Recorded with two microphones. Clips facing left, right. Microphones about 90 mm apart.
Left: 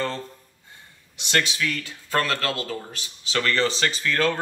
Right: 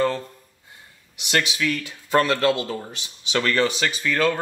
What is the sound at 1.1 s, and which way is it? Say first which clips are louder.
Speech: right 1 dB; 15° right (ahead or behind).